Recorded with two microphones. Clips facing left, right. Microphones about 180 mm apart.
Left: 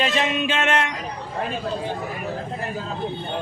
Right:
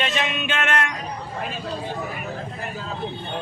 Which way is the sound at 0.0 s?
30° left (ahead or behind).